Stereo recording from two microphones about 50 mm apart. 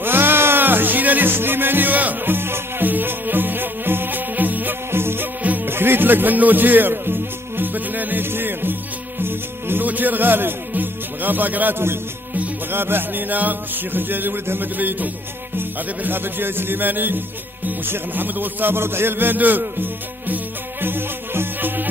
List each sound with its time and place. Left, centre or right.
0.0 s music: right
4.9 s music: right
5.4 s music: right
5.7 s speech: right
9.2 s music: right
12.7 s a man's voice: right
15.5 s music: right
17.6 s a man's voice: right
20.8 s music: right